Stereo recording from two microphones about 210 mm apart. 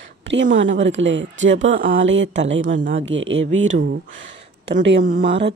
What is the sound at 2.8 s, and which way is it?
Speech, 40° right (ahead or behind).